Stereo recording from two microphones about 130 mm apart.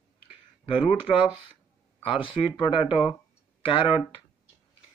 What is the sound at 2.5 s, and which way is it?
Speech, 40° left (ahead or behind).